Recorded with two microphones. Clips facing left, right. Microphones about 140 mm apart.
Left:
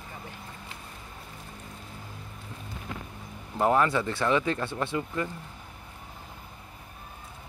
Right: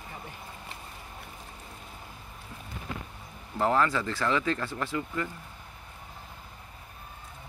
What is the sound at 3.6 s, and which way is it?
Speech, 20° left (ahead or behind).